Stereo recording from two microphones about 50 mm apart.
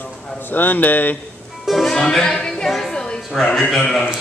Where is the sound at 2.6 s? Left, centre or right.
Centre.